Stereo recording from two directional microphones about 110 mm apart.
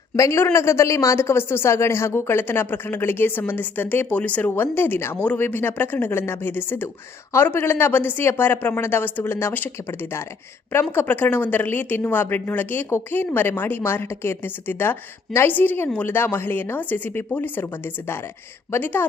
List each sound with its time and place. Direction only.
0.2 s speech: 25° left (ahead or behind)